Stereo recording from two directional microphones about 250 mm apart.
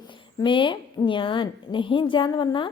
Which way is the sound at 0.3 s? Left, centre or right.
Centre.